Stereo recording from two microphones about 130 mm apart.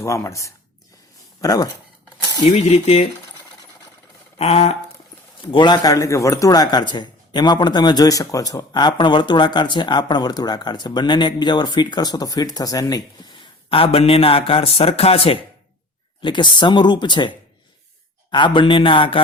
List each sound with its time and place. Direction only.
0.0 s speech: 25° left (ahead or behind)
2.4 s speech: 50° left (ahead or behind)
4.4 s a sound: 55° left (ahead or behind)
5.4 s a man's voice: 40° left (ahead or behind)
16.2 s a man's voice: 35° left (ahead or behind)